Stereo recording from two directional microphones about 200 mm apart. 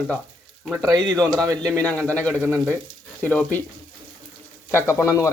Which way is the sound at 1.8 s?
5° left (ahead or behind).